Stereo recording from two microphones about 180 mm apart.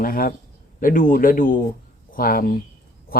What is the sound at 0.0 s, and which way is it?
A man's voice, 50° left (ahead or behind).